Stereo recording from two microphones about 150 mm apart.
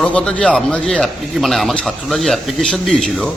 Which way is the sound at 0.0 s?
5° left (ahead or behind).